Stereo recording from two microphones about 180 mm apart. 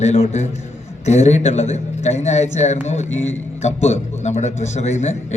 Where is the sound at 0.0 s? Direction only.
35° left (ahead or behind).